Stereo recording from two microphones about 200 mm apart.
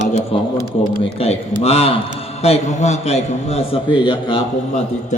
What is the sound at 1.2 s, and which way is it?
A man's voice, 30° left (ahead or behind).